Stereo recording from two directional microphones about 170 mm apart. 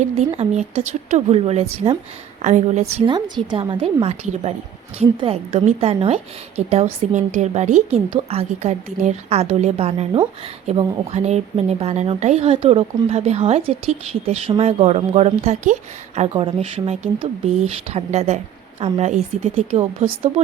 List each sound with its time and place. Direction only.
0.0 s a woman's voice: 40° right (ahead or behind)
3.1 s speech: 25° right (ahead or behind)